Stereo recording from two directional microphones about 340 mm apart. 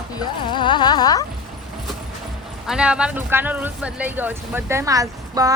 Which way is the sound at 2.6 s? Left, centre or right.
Centre.